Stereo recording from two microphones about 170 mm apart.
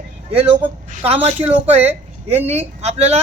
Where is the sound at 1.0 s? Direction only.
40° right (ahead or behind).